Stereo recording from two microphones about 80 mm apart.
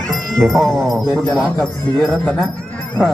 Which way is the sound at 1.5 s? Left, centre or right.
Left.